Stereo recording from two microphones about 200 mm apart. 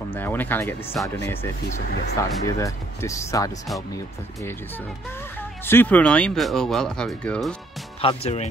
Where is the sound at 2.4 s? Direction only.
15° left (ahead or behind).